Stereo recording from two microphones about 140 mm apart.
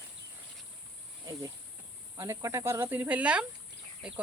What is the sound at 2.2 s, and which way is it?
Speech, 20° right (ahead or behind).